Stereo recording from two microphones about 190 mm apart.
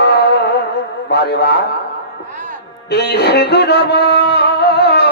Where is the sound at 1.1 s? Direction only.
60° left (ahead or behind).